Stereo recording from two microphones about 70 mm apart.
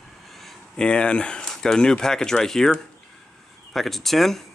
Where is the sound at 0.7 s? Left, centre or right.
Centre.